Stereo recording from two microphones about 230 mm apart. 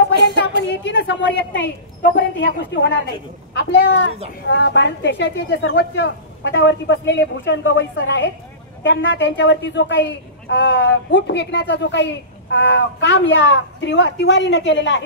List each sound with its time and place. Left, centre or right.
0.4 s a woman's voice: left